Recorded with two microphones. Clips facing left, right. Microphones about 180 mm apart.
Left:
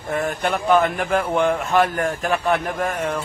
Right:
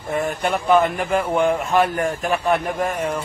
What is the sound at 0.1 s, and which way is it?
A man's voice, centre (ahead or behind).